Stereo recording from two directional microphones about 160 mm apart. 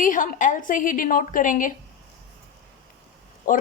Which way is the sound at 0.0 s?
55° left (ahead or behind).